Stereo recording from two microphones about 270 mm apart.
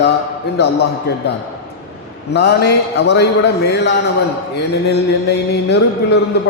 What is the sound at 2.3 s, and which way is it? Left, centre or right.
Speech, left.